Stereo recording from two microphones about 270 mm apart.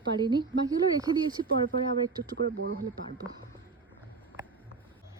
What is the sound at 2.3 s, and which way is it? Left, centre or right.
Speech, right.